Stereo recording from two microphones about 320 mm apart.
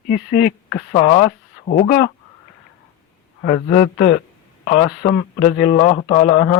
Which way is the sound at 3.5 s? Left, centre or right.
Left.